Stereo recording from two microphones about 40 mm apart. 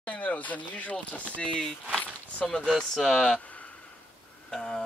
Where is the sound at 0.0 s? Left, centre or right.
Left.